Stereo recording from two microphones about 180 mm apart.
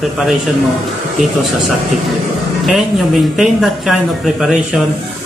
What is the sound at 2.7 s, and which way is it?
Speech, centre (ahead or behind).